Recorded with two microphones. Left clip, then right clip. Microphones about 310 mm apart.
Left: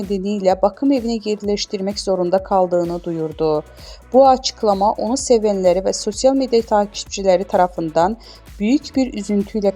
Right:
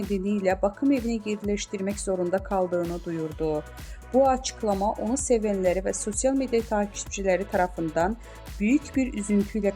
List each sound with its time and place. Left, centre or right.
0.1 s speech: centre